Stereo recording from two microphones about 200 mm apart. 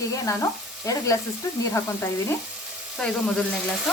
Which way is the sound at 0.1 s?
15° left (ahead or behind).